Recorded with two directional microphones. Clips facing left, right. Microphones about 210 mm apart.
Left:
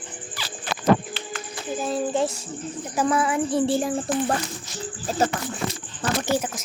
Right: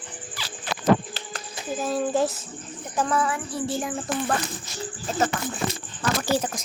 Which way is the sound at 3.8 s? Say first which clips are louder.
Left 4 dB; 35° left (ahead or behind).